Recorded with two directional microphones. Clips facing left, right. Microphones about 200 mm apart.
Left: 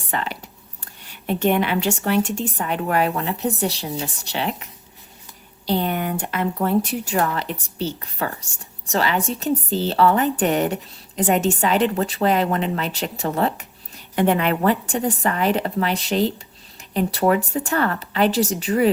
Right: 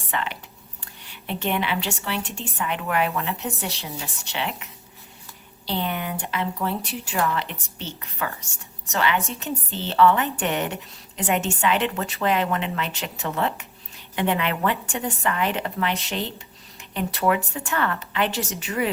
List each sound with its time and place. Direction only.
0.1 s a woman's voice: 40° left (ahead or behind)